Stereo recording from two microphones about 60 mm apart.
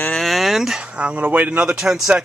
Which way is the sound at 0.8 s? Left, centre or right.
Centre.